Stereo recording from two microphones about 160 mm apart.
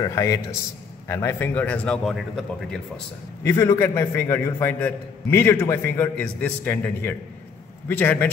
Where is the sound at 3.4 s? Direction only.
20° left (ahead or behind).